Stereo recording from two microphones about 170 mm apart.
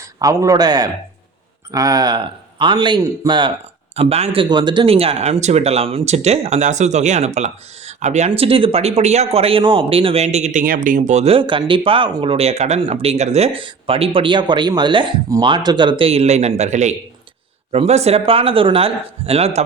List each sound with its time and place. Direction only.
0.2 s speech: 20° right (ahead or behind)
3.9 s speech: 35° right (ahead or behind)